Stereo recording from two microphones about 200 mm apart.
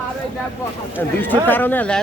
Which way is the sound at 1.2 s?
10° left (ahead or behind).